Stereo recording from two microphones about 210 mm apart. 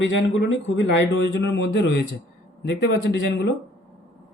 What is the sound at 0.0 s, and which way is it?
Speech, 60° left (ahead or behind).